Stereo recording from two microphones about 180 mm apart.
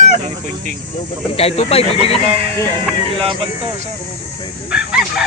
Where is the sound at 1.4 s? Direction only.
35° left (ahead or behind).